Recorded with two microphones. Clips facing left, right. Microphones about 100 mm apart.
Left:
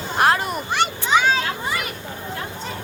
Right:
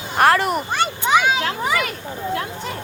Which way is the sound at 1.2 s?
10° right (ahead or behind).